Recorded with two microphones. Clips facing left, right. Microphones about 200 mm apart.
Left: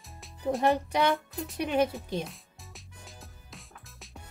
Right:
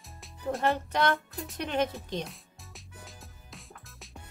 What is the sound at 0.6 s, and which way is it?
Speech, 15° left (ahead or behind).